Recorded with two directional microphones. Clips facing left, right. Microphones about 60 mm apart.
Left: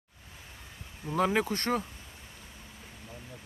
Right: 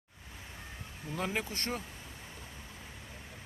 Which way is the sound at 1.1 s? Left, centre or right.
Left.